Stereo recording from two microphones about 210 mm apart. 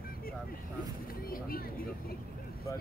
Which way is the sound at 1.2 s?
45° left (ahead or behind).